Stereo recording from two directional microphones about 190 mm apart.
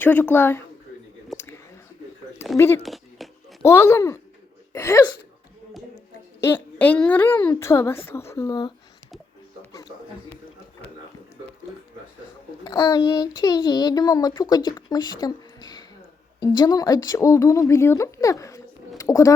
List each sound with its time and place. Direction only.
0.0 s a woman's voice: 10° left (ahead or behind)
2.6 s a woman's voice: 15° left (ahead or behind)
2.8 s a sound: centre (ahead or behind)
3.6 s a woman's voice: 15° left (ahead or behind)
6.5 s a woman's voice: 10° left (ahead or behind)
12.6 s speech: 20° left (ahead or behind)